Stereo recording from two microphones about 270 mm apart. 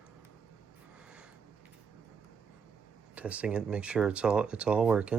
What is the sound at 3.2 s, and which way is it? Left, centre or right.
Speech, centre.